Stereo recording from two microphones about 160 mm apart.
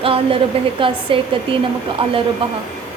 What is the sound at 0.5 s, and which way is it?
A woman's voice, 35° right (ahead or behind).